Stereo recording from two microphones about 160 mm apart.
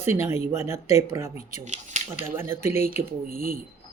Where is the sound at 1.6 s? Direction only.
50° right (ahead or behind).